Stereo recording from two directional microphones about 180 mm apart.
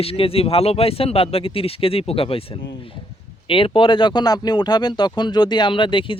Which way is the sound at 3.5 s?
30° left (ahead or behind).